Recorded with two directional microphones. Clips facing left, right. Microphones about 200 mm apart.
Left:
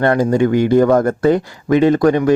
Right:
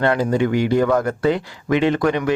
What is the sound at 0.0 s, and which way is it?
Speech, 45° left (ahead or behind).